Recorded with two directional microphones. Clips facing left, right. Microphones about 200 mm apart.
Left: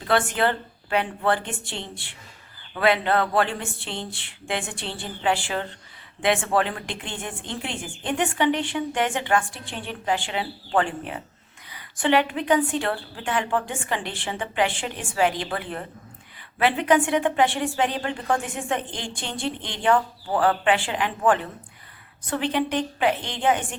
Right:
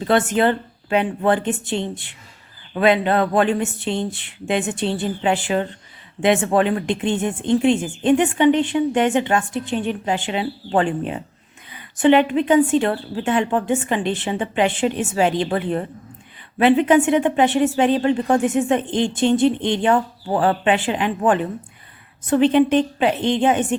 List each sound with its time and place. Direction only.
0.0 s speech: 25° right (ahead or behind)